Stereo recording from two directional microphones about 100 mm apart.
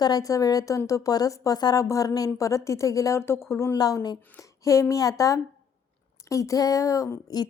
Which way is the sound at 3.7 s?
40° left (ahead or behind).